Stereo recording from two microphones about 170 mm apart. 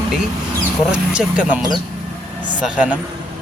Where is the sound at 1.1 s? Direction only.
5° right (ahead or behind).